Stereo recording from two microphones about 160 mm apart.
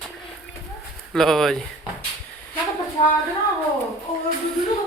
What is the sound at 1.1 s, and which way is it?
Speech, 5° left (ahead or behind).